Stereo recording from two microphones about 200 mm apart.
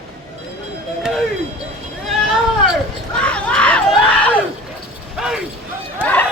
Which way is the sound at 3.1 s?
5° left (ahead or behind).